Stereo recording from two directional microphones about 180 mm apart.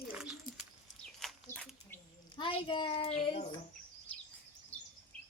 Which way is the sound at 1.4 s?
10° left (ahead or behind).